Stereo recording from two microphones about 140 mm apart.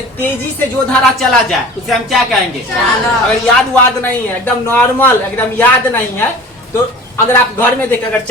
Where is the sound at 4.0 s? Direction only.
15° left (ahead or behind).